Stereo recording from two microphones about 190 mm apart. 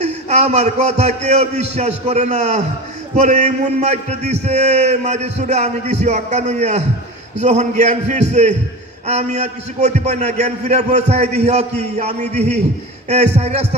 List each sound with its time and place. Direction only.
0.0 s a man's voice: 35° right (ahead or behind)